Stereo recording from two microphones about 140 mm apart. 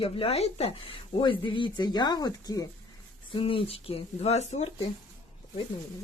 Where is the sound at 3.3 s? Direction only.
40° left (ahead or behind).